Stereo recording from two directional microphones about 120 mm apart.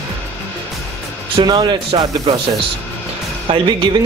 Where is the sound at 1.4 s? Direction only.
35° right (ahead or behind).